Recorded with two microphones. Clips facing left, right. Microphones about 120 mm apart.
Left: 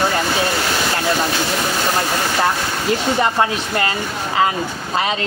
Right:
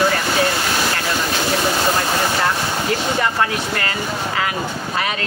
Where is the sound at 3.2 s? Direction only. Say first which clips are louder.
Left 2 dB; 25° left (ahead or behind).